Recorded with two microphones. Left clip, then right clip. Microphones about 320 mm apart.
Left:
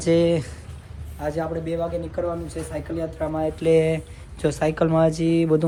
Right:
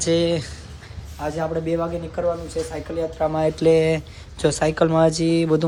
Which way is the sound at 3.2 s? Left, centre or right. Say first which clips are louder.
Right 5 dB; right.